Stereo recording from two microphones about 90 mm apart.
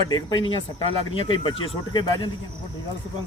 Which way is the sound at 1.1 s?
70° left (ahead or behind).